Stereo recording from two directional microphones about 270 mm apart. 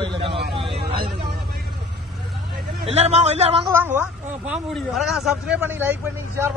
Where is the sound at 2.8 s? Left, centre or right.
Right.